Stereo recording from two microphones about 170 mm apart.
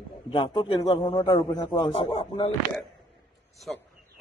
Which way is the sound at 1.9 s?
35° left (ahead or behind).